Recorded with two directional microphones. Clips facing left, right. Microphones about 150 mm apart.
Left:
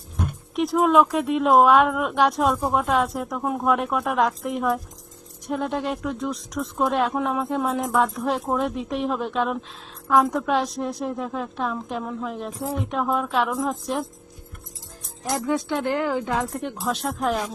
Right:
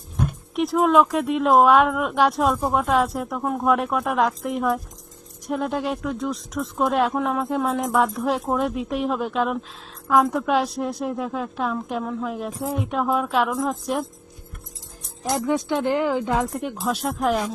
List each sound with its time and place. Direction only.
0.5 s speech: centre (ahead or behind)
15.2 s speech: 20° right (ahead or behind)
16.5 s speech: centre (ahead or behind)